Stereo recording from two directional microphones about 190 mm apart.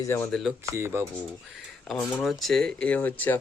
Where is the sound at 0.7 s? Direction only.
15° right (ahead or behind).